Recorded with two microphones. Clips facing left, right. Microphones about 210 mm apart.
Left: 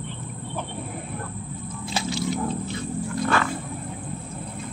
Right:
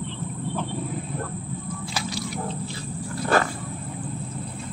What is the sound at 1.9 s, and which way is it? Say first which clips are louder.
Wild animals: left 6 dB; 25° left (ahead or behind).